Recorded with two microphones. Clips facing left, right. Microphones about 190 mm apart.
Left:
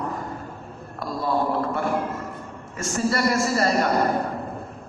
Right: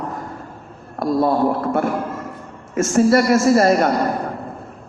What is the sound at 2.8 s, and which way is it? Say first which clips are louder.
A woman's voice: right 9 dB; 50° right (ahead or behind).